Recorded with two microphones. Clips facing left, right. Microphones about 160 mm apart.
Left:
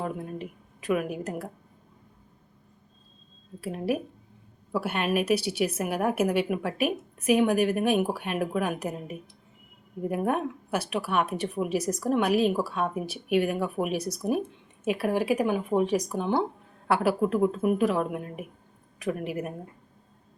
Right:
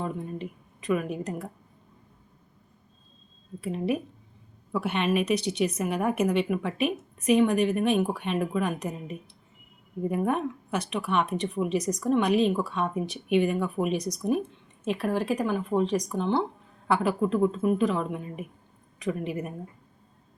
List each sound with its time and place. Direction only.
0.0 s a woman's voice: 5° left (ahead or behind)
3.6 s a woman's voice: 5° left (ahead or behind)